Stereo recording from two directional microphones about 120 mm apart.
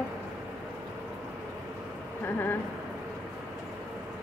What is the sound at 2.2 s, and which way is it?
Speech, 15° left (ahead or behind).